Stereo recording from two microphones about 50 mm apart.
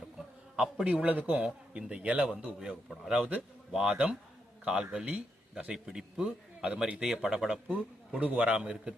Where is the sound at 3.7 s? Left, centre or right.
Centre.